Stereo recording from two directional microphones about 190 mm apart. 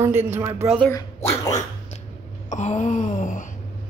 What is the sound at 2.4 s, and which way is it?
Wail, 40° left (ahead or behind).